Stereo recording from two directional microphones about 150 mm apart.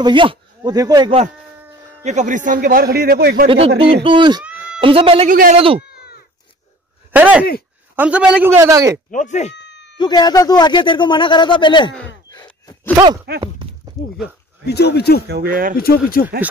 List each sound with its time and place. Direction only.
0.0 s speech: 35° right (ahead or behind)
2.0 s a man's voice: 55° right (ahead or behind); by 3.4 s 90° right
3.4 s speech: 40° right (ahead or behind)
4.5 s a sound: 10° right (ahead or behind)
4.7 s speech: 35° right (ahead or behind)
5.3 s a man's voice: 70° right (ahead or behind)
5.6 s speech: 40° right (ahead or behind)
7.1 s a man's voice: 10° right (ahead or behind)
9.1 s speech: 55° left (ahead or behind)
9.9 s speech: 30° left (ahead or behind)
13.3 s speech: 90° right
14.7 s speech: 90° left
15.2 s speech: 90° right
16.2 s speech: 75° left (ahead or behind)